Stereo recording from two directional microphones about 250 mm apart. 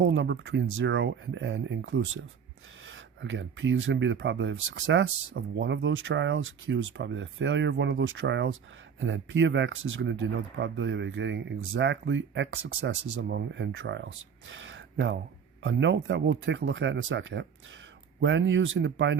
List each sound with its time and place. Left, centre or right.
0.0 s speech: right